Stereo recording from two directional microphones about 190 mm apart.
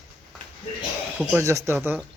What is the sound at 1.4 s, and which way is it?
Speech, 15° right (ahead or behind).